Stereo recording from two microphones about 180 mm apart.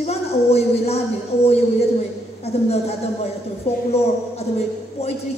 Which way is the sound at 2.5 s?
35° left (ahead or behind).